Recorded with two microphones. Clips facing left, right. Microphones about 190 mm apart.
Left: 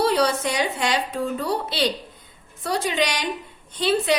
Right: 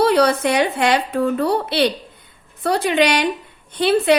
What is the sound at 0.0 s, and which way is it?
A woman's voice, 60° right (ahead or behind).